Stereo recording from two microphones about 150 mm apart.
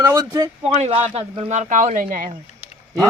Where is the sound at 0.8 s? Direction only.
45° right (ahead or behind); by 2.3 s 65° right (ahead or behind).